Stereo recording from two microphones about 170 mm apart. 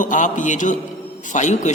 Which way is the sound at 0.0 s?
50° left (ahead or behind).